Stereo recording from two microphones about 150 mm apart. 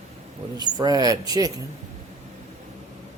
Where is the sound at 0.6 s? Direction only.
25° right (ahead or behind).